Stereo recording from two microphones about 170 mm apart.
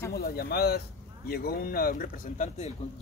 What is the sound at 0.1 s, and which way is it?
Speech, 65° left (ahead or behind).